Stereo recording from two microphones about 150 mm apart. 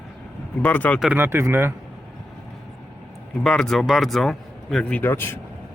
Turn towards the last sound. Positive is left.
turn(degrees=15)  # may be behind; listen again after turning